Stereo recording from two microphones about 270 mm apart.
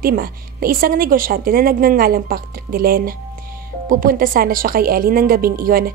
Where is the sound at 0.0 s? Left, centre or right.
Right.